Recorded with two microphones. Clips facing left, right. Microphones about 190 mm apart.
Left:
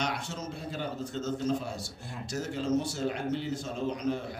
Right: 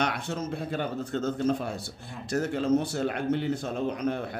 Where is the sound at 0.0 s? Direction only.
60° right (ahead or behind).